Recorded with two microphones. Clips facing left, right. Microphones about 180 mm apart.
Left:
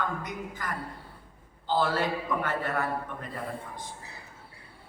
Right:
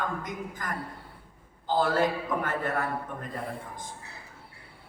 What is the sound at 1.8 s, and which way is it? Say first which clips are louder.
Speech: right 5 dB; 45° right (ahead or behind).